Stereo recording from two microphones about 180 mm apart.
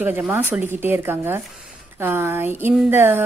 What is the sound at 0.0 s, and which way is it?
Speech, 10° right (ahead or behind).